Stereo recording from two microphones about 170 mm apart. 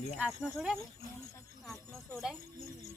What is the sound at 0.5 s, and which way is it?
Speech, centre (ahead or behind).